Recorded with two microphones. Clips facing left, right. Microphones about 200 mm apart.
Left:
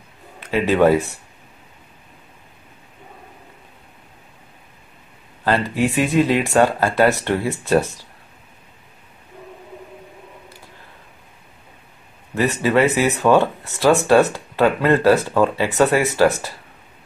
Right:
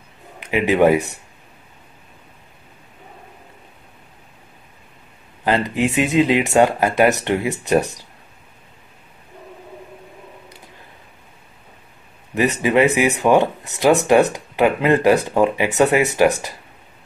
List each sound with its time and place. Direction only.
0.4 s speech: 15° right (ahead or behind)
5.4 s speech: 20° right (ahead or behind)
12.4 s speech: 15° right (ahead or behind)